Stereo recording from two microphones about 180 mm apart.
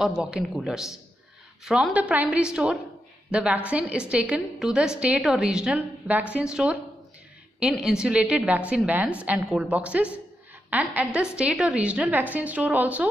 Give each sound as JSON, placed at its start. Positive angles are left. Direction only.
{"t": 0.0, "sound": "a woman's voice", "side_deg": -5}